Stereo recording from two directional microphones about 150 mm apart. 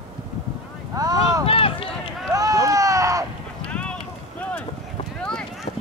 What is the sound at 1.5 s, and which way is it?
Run, 40° left (ahead or behind).